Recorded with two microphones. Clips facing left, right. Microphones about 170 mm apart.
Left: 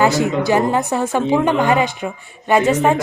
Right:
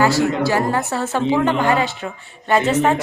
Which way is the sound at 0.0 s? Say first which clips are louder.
Left 1 dB; 20° left (ahead or behind).